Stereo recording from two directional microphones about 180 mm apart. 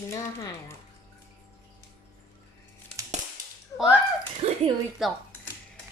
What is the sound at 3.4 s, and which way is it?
Cap gun, 50° right (ahead or behind).